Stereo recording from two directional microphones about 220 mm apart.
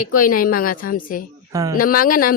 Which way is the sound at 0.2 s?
40° left (ahead or behind).